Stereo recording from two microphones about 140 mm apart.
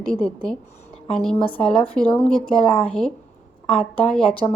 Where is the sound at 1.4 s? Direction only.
40° left (ahead or behind).